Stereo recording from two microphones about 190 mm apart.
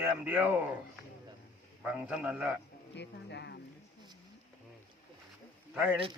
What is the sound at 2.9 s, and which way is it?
Speech, 65° left (ahead or behind).